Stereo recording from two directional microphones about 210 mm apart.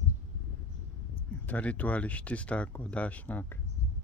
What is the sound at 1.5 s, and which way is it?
Speech, 5° left (ahead or behind).